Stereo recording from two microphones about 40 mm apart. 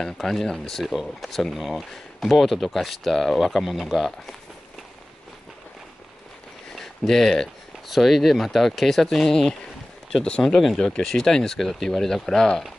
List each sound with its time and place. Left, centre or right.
0.0 s speech: centre
6.7 s a sound: centre
7.9 s speech: centre
10.4 s speech: centre
11.1 s speech: centre